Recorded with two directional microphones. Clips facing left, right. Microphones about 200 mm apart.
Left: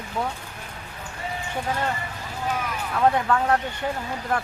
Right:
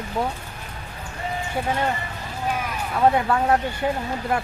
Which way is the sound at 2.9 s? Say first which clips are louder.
Right 2 dB; 15° right (ahead or behind).